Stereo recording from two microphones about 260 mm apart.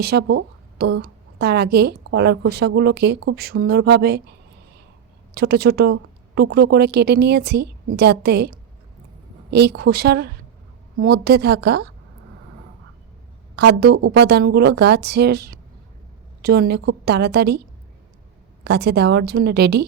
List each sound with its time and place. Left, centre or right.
0.0 s a woman's voice: right
5.3 s a woman's voice: right
13.7 s a woman's voice: right
18.6 s a woman's voice: right